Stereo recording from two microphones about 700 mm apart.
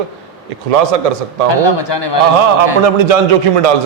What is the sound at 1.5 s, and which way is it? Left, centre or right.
Speech, left.